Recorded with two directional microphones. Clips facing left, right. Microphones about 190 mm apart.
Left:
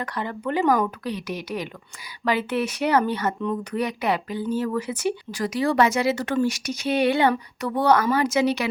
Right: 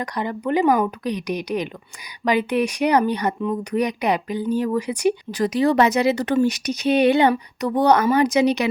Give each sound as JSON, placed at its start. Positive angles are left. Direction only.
{"t": 0.0, "sound": "speech", "side_deg": -15}